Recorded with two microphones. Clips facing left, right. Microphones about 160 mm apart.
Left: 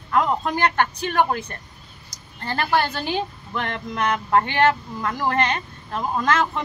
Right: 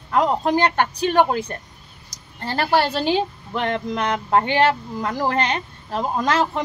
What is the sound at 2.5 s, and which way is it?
A woman's voice, 35° right (ahead or behind).